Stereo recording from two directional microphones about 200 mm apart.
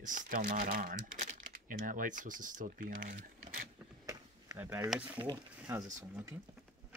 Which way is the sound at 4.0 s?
15° right (ahead or behind).